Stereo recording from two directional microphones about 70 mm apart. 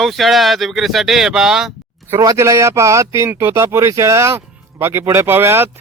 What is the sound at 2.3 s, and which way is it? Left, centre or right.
Speech, right.